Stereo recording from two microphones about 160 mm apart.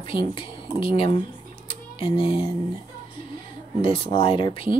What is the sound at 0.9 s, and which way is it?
Speech, 35° left (ahead or behind).